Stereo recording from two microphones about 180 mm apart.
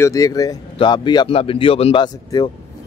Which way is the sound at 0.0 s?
20° left (ahead or behind).